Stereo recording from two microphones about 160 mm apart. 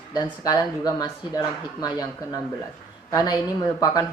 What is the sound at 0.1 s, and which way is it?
Speech, 25° left (ahead or behind).